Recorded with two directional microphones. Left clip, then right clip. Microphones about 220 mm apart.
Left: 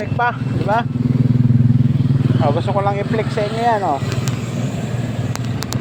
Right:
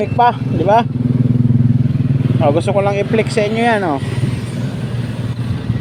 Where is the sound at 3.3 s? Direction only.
60° right (ahead or behind).